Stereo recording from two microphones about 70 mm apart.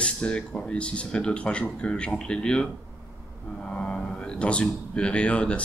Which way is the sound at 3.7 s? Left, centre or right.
Centre.